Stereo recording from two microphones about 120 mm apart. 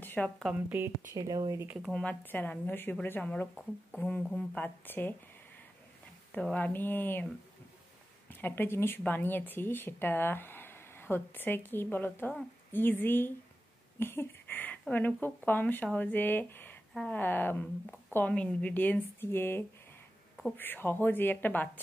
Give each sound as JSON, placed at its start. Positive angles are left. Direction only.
{"t": 0.0, "sound": "a sound", "side_deg": 15}
{"t": 0.7, "sound": "speech", "side_deg": -15}
{"t": 1.1, "sound": "speech", "side_deg": -30}
{"t": 1.9, "sound": "speech", "side_deg": 5}
{"t": 6.3, "sound": "speech", "side_deg": 10}
{"t": 8.3, "sound": "speech", "side_deg": 15}